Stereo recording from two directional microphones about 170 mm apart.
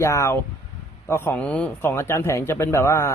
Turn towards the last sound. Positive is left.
turn(degrees=15)  # may be behind; listen again after turning